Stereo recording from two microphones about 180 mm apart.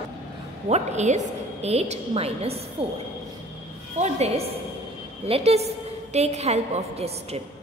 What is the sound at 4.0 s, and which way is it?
A woman's voice, 35° right (ahead or behind).